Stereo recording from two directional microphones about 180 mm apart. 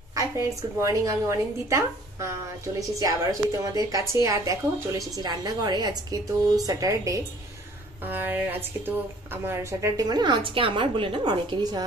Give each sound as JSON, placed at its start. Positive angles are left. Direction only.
{"t": 0.1, "sound": "a woman's voice", "side_deg": -15}